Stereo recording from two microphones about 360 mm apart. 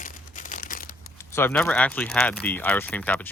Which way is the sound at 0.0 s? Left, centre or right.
Left.